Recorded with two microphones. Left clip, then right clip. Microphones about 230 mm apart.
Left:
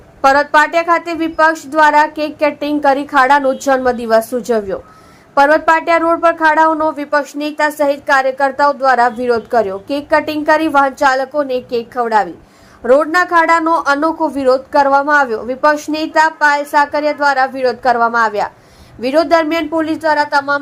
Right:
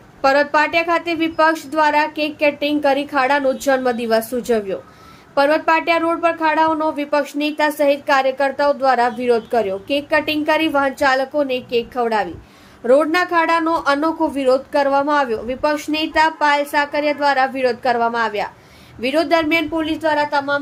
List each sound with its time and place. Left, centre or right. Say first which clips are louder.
0.2 s a woman's voice: left 5 dB; centre; by 20.6 s left